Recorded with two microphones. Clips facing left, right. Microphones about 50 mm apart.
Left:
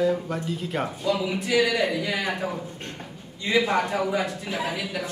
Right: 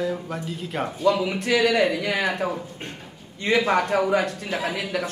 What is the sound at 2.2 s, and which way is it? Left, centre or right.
Speech, right.